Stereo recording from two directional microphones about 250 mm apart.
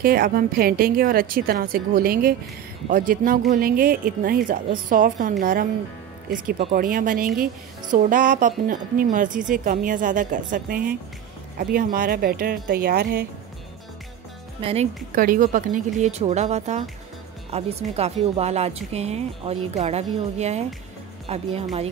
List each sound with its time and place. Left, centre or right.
0.0 s a woman's voice: right
14.6 s speech: right
15.1 s speech: right